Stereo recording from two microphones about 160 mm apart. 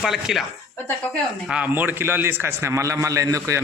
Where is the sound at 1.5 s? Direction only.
10° right (ahead or behind).